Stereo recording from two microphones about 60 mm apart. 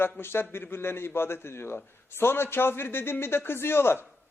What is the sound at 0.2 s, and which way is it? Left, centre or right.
Speech, left.